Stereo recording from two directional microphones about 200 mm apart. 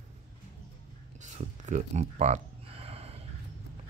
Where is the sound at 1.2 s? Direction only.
35° right (ahead or behind).